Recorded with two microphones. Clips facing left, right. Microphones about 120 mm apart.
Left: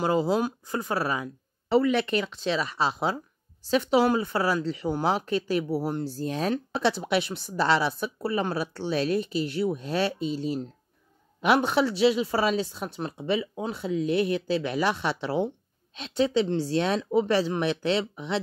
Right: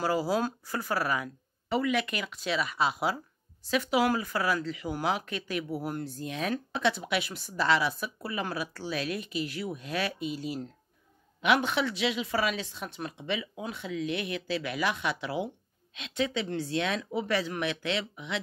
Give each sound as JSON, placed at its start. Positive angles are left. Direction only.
{"t": 0.0, "sound": "speech", "side_deg": 25}